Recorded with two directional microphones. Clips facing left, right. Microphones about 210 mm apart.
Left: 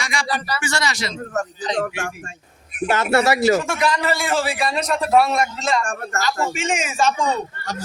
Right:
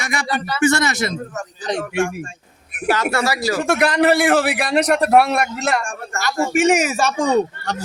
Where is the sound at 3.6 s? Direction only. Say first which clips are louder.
Right 6 dB; 65° right (ahead or behind).